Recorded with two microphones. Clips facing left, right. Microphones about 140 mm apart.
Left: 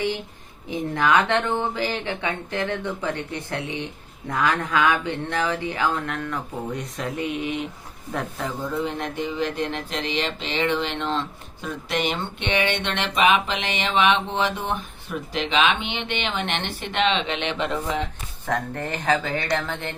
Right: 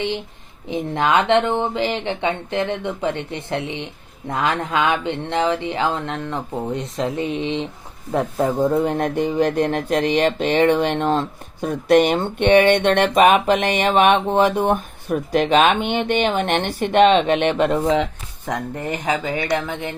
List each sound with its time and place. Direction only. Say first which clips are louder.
0.7 s speech: right 2 dB; 20° right (ahead or behind)
8.4 s speech: right 11 dB; 45° right (ahead or behind)
18.4 s speech: right 2 dB; 15° right (ahead or behind)